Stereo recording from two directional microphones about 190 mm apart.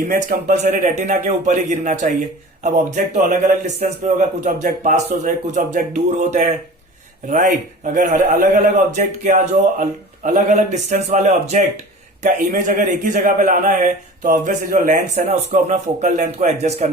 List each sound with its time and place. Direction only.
0.1 s a man's voice: 45° right (ahead or behind)